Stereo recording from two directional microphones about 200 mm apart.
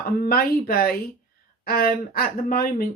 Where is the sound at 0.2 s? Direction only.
50° left (ahead or behind).